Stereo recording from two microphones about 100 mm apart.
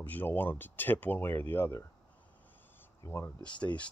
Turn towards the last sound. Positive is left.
turn(degrees=50)  # may be behind; listen again after turning